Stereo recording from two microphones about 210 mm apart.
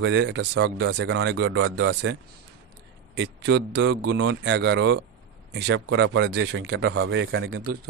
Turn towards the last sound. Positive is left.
turn(degrees=-80)